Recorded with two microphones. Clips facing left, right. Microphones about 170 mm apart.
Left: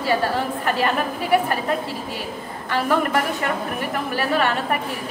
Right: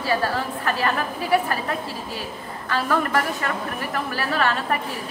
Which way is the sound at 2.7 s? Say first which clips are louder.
Left 2 dB; 15° left (ahead or behind).